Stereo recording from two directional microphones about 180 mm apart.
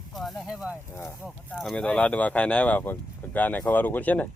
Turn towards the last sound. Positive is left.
turn(degrees=10)  # may be behind; listen again after turning